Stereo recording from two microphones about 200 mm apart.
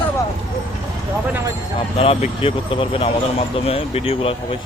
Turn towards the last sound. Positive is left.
turn(degrees=30)  # may be behind; listen again after turning